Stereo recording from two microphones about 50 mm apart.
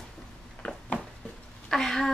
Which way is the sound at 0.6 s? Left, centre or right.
Left.